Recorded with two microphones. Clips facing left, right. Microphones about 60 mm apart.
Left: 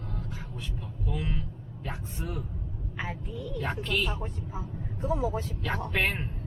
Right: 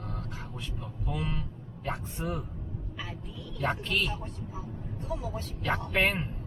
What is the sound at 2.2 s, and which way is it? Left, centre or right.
Speech, right.